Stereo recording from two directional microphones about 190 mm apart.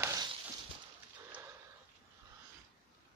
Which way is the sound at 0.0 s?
20° right (ahead or behind).